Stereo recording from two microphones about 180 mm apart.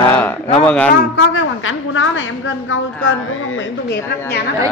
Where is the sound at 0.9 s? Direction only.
85° left.